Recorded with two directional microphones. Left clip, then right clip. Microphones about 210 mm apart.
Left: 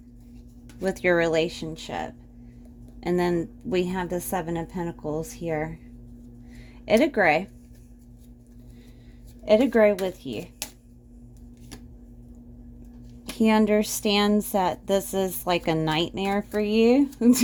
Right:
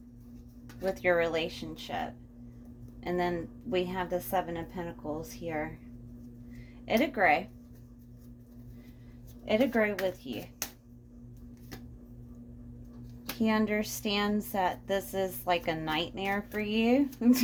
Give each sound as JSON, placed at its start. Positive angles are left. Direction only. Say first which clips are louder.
{"t": 0.8, "sound": "a woman's voice", "louder": "left 5 dB", "side_deg": 60}
{"t": 6.8, "sound": "a woman's voice", "louder": "left 6 dB", "side_deg": 60}
{"t": 9.4, "sound": "a woman's voice", "louder": "left 9 dB", "side_deg": 55}
{"t": 13.4, "sound": "a woman's voice", "louder": "left 9 dB", "side_deg": 50}